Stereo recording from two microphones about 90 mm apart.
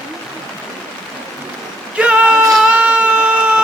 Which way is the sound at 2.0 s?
10° right (ahead or behind).